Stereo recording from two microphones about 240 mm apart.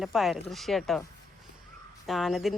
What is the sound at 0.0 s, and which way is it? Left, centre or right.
Speech, centre.